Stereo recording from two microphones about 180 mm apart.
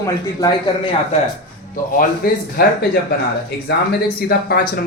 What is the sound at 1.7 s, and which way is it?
Speech, 50° left (ahead or behind).